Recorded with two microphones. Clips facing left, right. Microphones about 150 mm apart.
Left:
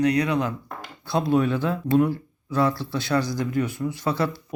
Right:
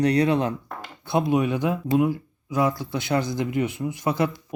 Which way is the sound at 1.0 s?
20° right (ahead or behind).